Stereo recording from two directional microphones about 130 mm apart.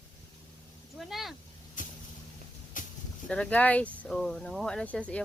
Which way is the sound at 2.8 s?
85° left.